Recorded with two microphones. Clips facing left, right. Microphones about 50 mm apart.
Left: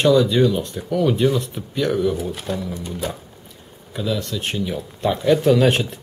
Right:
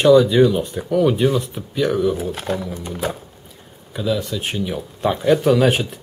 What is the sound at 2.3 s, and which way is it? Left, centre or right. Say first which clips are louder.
Speech: right 3 dB; right.